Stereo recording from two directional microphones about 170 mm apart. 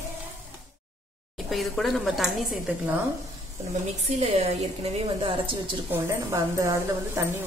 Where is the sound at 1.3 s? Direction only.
Centre (ahead or behind).